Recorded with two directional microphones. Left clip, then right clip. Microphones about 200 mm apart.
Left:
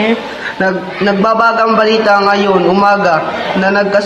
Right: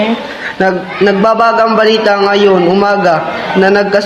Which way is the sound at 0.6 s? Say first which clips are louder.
Right 3 dB; 40° right (ahead or behind).